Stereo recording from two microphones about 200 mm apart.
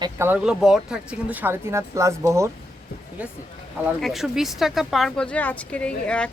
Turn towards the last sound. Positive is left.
turn(degrees=5)  # may be behind; listen again after turning